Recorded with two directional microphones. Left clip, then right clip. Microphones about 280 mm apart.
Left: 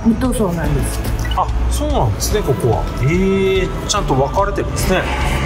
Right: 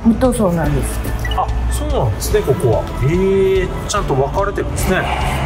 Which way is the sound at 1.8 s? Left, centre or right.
Centre.